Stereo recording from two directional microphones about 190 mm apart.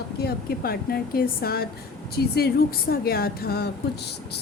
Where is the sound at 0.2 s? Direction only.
55° left (ahead or behind).